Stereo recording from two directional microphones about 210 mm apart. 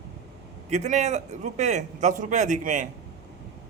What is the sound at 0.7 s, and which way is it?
A man's voice, 35° right (ahead or behind).